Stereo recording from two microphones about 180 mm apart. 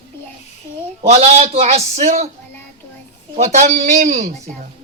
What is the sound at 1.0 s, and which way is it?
A man's voice, 35° right (ahead or behind).